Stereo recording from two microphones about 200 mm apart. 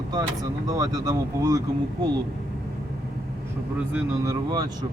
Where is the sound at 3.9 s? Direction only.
15° right (ahead or behind).